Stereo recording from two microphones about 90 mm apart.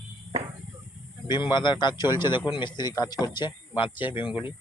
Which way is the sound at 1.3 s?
55° left (ahead or behind).